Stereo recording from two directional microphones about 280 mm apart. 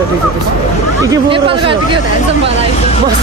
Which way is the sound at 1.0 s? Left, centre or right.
Centre.